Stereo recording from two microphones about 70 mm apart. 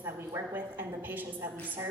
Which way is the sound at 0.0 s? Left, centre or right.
Right.